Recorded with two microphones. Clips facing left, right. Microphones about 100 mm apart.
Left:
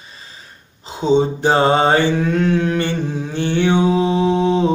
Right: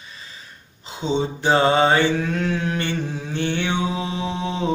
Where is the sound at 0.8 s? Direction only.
40° left (ahead or behind).